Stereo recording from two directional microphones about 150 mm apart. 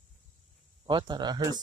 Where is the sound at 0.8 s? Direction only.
30° right (ahead or behind).